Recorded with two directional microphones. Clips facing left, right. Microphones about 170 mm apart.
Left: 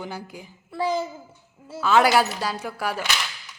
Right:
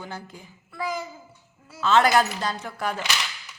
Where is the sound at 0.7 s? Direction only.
30° left (ahead or behind).